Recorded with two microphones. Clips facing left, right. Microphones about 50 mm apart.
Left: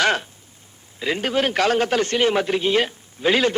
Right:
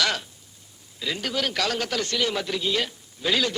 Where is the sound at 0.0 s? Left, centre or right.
Left.